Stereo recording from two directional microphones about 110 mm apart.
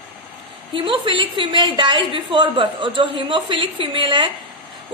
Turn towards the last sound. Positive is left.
turn(degrees=-45)  # may be behind; listen again after turning